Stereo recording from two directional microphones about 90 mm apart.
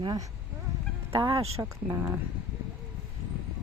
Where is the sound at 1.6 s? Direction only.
35° right (ahead or behind).